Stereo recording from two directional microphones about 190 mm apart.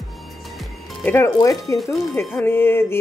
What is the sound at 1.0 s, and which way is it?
Music, 15° left (ahead or behind).